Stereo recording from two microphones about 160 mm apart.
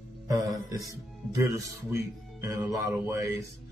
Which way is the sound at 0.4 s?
Centre (ahead or behind).